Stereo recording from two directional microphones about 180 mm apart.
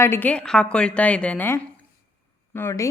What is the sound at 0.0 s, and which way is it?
A woman's voice, 10° left (ahead or behind).